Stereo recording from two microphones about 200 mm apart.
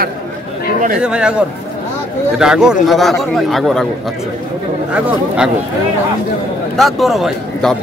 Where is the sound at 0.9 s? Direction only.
5° right (ahead or behind).